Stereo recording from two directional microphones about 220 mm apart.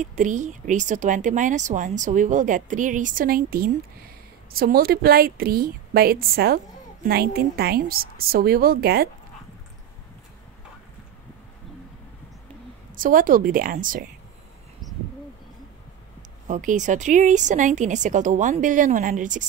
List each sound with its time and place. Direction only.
0.0 s a woman's voice: 35° right (ahead or behind)
12.9 s speech: 40° right (ahead or behind)
16.2 s speech: 35° right (ahead or behind)